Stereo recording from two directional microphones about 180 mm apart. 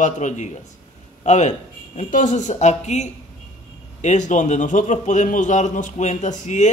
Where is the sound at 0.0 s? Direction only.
40° left (ahead or behind).